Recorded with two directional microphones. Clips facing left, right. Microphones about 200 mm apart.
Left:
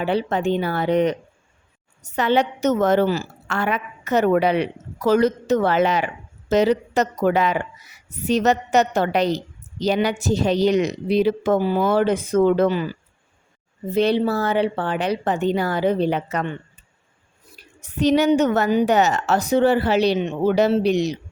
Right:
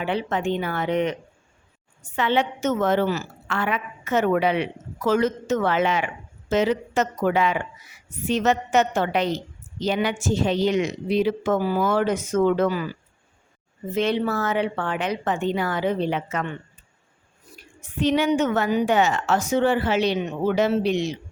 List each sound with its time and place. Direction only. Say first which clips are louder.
0.0 s a woman's voice: left 4 dB; 35° left (ahead or behind)
2.1 s a woman's voice: left 3 dB; 40° left (ahead or behind)
13.9 s a woman's voice: left 4 dB; 35° left (ahead or behind)
17.6 s a woman's voice: left 3 dB; 40° left (ahead or behind)